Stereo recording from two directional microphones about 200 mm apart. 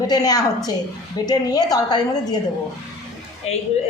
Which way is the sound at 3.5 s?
30° left (ahead or behind).